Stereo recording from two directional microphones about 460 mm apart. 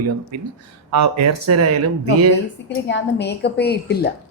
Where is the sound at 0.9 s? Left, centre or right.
Right.